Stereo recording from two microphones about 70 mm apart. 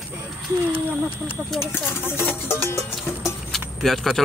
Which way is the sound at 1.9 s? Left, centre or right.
Left.